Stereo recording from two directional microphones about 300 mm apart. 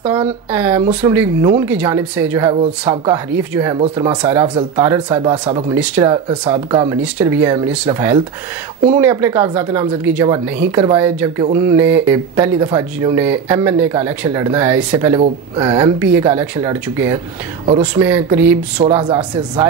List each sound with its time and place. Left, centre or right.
0.0 s speech: centre
15.7 s speech: centre